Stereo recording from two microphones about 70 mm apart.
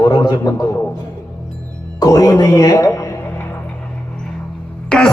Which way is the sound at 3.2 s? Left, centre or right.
Left.